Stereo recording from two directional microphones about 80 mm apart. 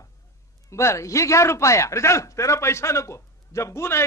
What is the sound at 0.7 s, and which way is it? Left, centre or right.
A man's voice, left.